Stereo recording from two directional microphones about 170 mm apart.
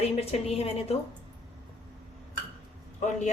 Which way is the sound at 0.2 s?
35° left (ahead or behind).